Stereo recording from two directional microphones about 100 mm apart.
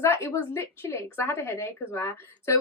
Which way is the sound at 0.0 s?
25° left (ahead or behind).